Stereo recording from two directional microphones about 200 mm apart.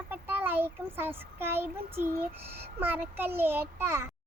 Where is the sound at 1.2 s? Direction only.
10° right (ahead or behind).